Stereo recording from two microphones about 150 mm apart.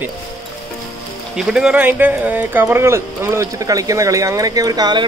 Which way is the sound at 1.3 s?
5° right (ahead or behind).